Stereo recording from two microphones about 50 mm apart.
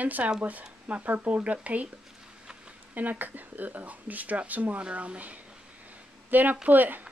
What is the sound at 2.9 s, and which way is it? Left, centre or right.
A woman's voice, right.